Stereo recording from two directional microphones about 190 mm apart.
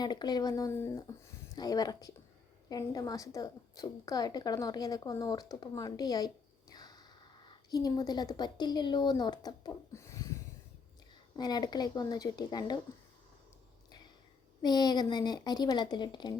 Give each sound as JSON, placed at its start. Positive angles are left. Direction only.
{"t": 0.0, "sound": "a woman's voice", "side_deg": 20}
{"t": 11.3, "sound": "speech", "side_deg": 20}
{"t": 14.6, "sound": "speech", "side_deg": 20}